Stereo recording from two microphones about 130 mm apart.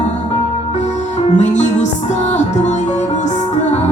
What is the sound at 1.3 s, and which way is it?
Music, 65° left (ahead or behind).